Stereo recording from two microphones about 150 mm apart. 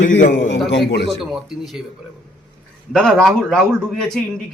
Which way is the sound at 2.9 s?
5° left (ahead or behind).